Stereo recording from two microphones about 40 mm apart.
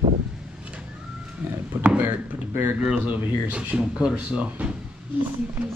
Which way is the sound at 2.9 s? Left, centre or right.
Right.